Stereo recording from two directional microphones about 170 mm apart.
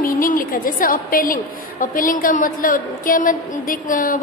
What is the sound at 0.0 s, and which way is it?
A woman's voice, 55° left (ahead or behind).